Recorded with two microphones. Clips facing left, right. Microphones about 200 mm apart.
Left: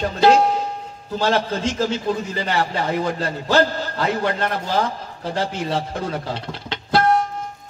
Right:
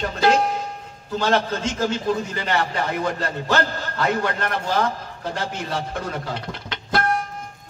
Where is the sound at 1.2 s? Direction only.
30° left (ahead or behind).